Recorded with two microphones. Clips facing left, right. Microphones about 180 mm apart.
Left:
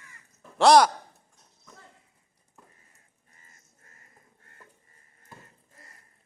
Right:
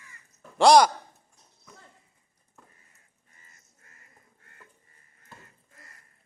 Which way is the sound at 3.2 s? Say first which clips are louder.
Left 1 dB; 35° left (ahead or behind).